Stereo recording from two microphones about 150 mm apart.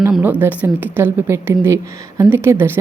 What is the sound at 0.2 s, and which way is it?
A woman's voice, 10° right (ahead or behind).